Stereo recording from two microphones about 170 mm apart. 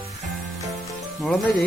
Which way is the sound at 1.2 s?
Centre (ahead or behind).